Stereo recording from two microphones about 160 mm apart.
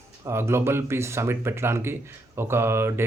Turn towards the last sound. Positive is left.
turn(degrees=-15)  # may be behind; listen again after turning